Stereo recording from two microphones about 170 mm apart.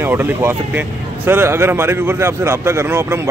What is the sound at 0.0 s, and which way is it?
A man's voice, 10° right (ahead or behind).